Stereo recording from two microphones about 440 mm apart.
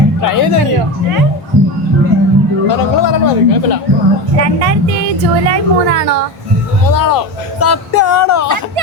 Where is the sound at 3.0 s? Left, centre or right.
Left.